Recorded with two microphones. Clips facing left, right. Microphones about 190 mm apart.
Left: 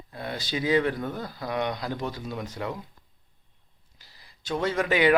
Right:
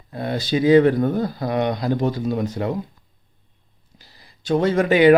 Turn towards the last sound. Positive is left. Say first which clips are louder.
# right 8 dB
turn(degrees=-25)  # may be behind; listen again after turning